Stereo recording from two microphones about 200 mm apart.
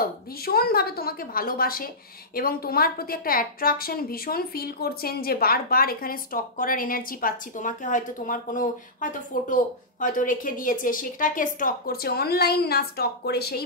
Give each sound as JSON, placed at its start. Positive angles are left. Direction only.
{"t": 0.0, "sound": "a woman's voice", "side_deg": 50}